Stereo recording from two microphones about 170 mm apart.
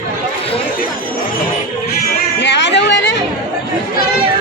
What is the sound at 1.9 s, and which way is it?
Music, 90° left.